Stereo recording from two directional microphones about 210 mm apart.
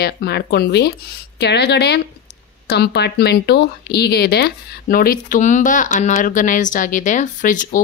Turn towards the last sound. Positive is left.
turn(degrees=40)  # may be behind; listen again after turning